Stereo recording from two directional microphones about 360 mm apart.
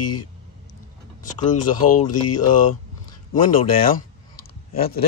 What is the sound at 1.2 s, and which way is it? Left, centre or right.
Speech, centre.